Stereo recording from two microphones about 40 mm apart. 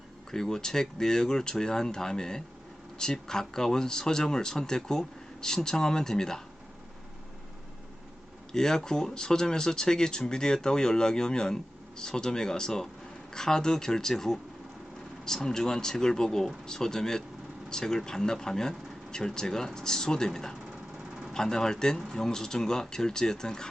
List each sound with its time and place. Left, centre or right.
0.3 s speech: centre
8.5 s speech: centre